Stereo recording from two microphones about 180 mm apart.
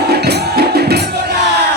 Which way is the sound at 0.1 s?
65° right (ahead or behind).